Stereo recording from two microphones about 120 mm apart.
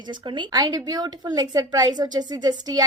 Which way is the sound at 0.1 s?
40° right (ahead or behind).